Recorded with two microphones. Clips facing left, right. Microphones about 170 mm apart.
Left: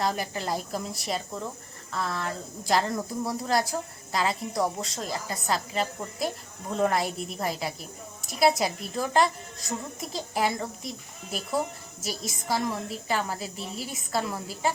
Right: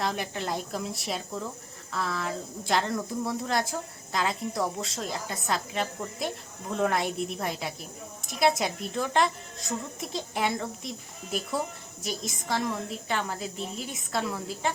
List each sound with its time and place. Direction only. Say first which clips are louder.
0.0 s a woman's voice: left 2 dB; centre (ahead or behind)